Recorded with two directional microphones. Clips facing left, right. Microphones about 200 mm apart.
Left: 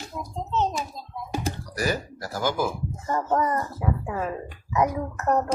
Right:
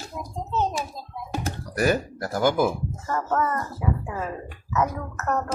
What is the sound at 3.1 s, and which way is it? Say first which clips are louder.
Speech: left 1 dB; 15° left (ahead or behind).